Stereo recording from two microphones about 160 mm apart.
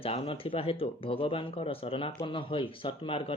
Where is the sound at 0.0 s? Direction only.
35° left (ahead or behind).